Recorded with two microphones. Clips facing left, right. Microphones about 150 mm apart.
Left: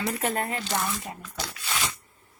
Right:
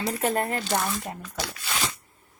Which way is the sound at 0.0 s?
40° right (ahead or behind).